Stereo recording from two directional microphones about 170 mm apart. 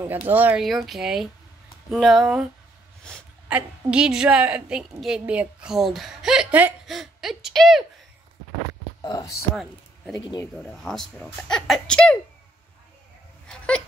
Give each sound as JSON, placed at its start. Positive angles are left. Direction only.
{"t": 0.0, "sound": "a woman's voice", "side_deg": -10}
{"t": 3.0, "sound": "a sound", "side_deg": 5}
{"t": 3.4, "sound": "a woman's voice", "side_deg": -5}
{"t": 9.0, "sound": "speech", "side_deg": 20}
{"t": 10.4, "sound": "a woman's voice", "side_deg": 5}
{"t": 13.5, "sound": "a sound", "side_deg": 5}